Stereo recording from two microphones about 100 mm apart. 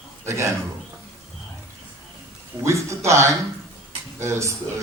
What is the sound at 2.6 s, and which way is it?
A man's voice, 30° right (ahead or behind).